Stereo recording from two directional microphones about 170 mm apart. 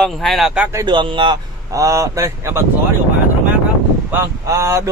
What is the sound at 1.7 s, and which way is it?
Speech, 20° right (ahead or behind).